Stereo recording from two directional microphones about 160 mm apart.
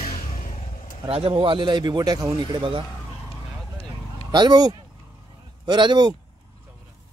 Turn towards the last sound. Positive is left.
turn(degrees=-30)  # may be behind; listen again after turning